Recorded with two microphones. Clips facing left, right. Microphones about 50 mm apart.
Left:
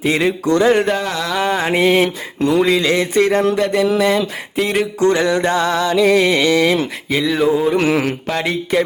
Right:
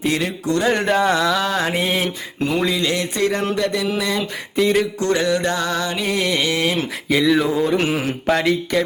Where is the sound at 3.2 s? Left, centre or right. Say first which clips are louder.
Left 4 dB; left.